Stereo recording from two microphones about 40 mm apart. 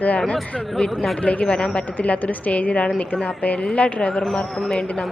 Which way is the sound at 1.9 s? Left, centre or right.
Left.